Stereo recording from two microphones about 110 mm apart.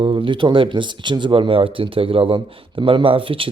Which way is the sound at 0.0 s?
55° right (ahead or behind).